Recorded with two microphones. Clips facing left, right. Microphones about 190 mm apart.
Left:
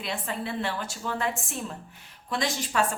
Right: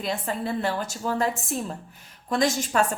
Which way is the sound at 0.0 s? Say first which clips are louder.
Right 4 dB; 40° right (ahead or behind).